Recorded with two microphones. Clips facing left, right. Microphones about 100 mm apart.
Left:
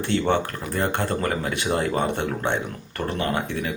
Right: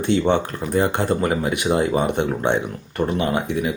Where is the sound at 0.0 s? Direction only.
20° right (ahead or behind).